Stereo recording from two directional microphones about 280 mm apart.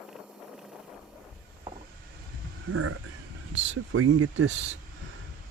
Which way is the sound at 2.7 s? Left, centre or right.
Right.